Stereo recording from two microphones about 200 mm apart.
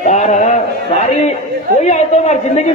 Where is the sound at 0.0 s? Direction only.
35° left (ahead or behind).